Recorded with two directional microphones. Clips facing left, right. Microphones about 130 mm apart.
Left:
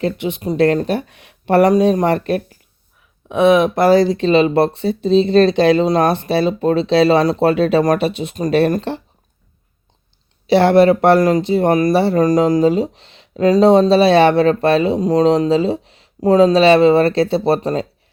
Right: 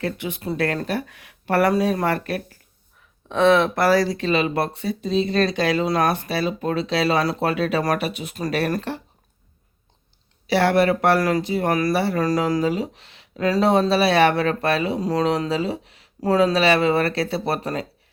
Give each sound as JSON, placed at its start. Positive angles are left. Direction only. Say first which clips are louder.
{"t": 0.0, "sound": "speech", "louder": "left 7 dB", "side_deg": 25}
{"t": 10.4, "sound": "speech", "louder": "left 7 dB", "side_deg": 25}